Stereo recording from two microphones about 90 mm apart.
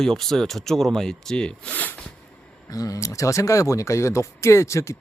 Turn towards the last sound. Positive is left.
turn(degrees=35)  # may be behind; listen again after turning